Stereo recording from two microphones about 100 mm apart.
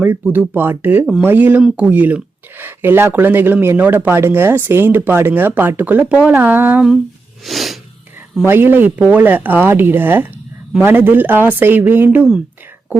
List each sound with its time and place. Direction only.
0.0 s speech: 15° right (ahead or behind)
1.2 s a sound: 20° right (ahead or behind)
1.6 s speech: 10° right (ahead or behind)
6.3 s a sound: 20° right (ahead or behind)
7.4 s snort: centre (ahead or behind)
8.4 s speech: 20° right (ahead or behind)